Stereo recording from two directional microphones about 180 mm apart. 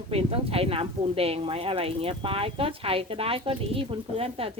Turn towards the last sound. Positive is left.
turn(degrees=-30)  # may be behind; listen again after turning